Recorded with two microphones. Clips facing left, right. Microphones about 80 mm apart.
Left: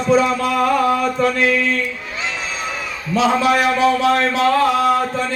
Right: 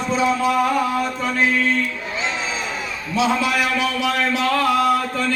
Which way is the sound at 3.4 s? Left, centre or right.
Left.